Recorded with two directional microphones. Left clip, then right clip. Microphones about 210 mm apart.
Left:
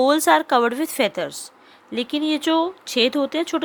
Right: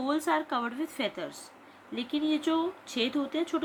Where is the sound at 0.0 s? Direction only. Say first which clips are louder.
Left 13 dB; 55° left (ahead or behind).